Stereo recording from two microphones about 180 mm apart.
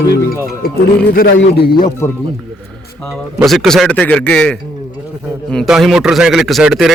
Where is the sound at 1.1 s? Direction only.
60° left (ahead or behind).